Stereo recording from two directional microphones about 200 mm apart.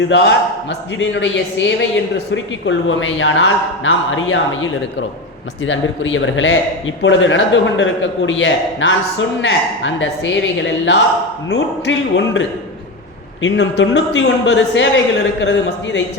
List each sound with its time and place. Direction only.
0.1 s a man's voice: 70° left (ahead or behind)